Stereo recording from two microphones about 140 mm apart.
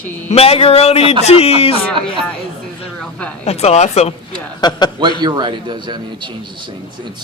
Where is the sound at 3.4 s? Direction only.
45° left (ahead or behind).